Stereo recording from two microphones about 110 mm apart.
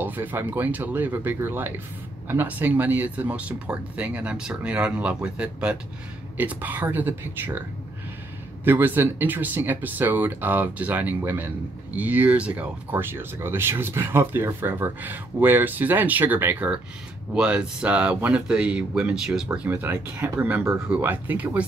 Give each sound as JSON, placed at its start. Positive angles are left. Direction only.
{"t": 0.0, "sound": "speech", "side_deg": -15}
{"t": 8.6, "sound": "speech", "side_deg": -20}